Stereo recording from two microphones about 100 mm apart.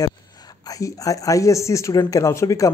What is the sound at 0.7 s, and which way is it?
Speech, 35° left (ahead or behind).